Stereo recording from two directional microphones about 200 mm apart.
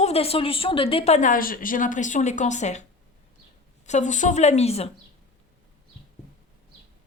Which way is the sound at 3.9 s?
40° left (ahead or behind).